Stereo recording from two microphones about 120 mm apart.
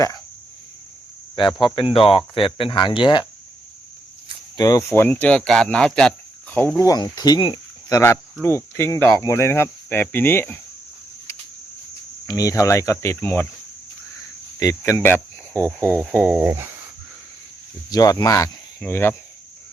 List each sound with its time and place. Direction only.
1.4 s speech: 40° left (ahead or behind)
4.5 s speech: 30° left (ahead or behind); by 6.6 s 5° left (ahead or behind)
6.7 s speech: 30° left (ahead or behind)
12.3 s speech: 30° left (ahead or behind)
14.6 s speech: 25° left (ahead or behind)
16.1 s cricket: 15° right (ahead or behind)
17.9 s speech: 30° left (ahead or behind)